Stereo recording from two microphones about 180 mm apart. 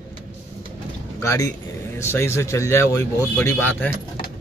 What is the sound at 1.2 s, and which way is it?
A man's voice, 15° left (ahead or behind).